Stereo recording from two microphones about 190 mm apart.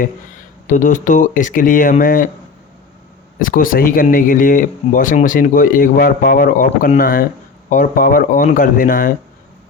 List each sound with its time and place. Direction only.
0.7 s speech: 40° left (ahead or behind)
3.3 s speech: 45° left (ahead or behind)